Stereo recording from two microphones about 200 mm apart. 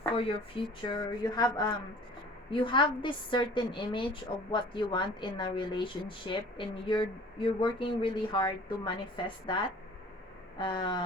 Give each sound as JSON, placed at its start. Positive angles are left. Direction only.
{"t": 0.9, "sound": "a woman's voice", "side_deg": 20}